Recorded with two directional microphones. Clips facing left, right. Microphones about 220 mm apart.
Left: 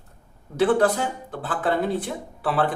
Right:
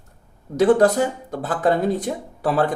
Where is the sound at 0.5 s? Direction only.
40° right (ahead or behind).